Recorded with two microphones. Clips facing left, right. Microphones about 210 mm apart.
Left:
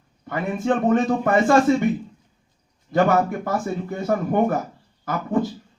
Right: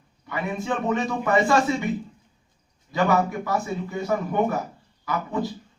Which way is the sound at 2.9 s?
50° left (ahead or behind).